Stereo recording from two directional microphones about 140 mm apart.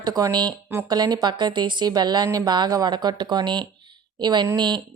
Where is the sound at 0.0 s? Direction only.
30° right (ahead or behind).